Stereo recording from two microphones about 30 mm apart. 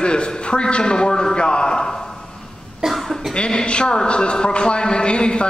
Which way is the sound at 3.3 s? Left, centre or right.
Left.